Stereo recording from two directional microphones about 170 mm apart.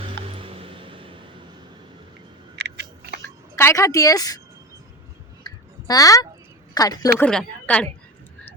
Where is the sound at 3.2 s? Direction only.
15° left (ahead or behind).